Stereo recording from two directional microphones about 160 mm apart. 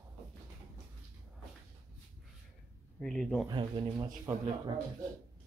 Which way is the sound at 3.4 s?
30° right (ahead or behind).